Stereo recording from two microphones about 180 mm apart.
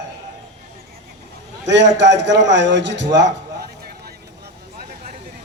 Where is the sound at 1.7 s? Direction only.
80° right.